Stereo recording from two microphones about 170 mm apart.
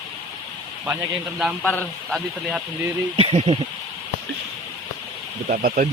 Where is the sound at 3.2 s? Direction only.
35° right (ahead or behind).